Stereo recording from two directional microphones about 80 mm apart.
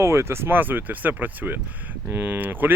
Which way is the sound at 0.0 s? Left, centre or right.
Right.